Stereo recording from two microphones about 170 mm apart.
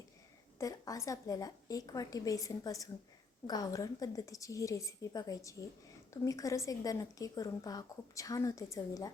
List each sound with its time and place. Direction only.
0.6 s a woman's voice: 20° left (ahead or behind)